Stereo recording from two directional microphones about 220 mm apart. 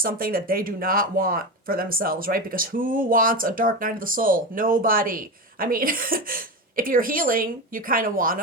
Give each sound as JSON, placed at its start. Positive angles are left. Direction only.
{"t": 0.0, "sound": "speech", "side_deg": -40}